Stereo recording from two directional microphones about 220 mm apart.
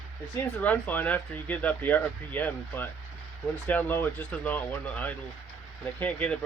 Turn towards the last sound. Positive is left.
turn(degrees=5)  # may be behind; listen again after turning